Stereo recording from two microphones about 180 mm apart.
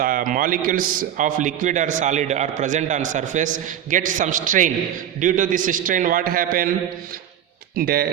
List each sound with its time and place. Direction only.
0.0 s a man's voice: 50° right (ahead or behind)
7.8 s speech: 60° right (ahead or behind)